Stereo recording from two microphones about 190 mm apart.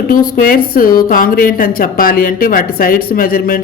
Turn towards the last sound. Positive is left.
turn(degrees=50)  # may be behind; listen again after turning